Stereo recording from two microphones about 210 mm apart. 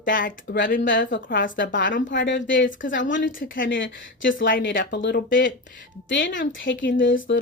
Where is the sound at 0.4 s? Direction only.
60° left (ahead or behind).